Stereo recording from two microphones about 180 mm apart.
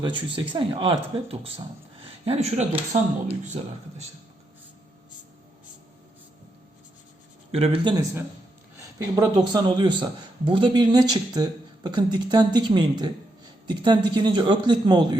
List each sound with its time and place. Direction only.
0.0 s speech: 30° right (ahead or behind)
7.5 s speech: 30° right (ahead or behind)
9.1 s a man's voice: 20° right (ahead or behind)